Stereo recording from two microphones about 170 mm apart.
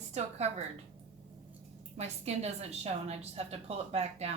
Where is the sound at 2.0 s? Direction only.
40° right (ahead or behind).